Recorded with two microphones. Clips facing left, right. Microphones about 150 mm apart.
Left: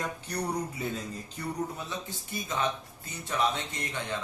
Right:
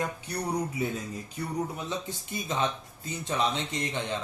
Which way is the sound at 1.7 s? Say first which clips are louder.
Right 3 dB; 20° right (ahead or behind).